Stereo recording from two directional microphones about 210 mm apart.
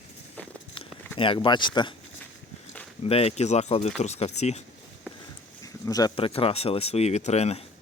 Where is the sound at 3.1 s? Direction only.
30° left (ahead or behind).